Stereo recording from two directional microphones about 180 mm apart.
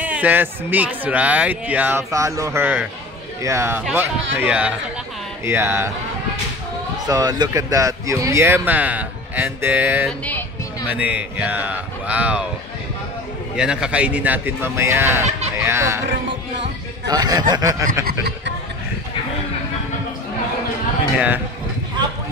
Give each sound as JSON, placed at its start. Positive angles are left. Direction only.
{"t": 0.0, "sound": "speech", "side_deg": -10}
{"t": 7.1, "sound": "speech", "side_deg": -20}
{"t": 13.6, "sound": "speech", "side_deg": -5}
{"t": 17.1, "sound": "a man's voice", "side_deg": -20}
{"t": 18.0, "sound": "speech", "side_deg": -65}